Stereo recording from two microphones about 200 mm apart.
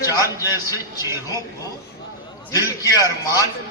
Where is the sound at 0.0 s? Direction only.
15° left (ahead or behind).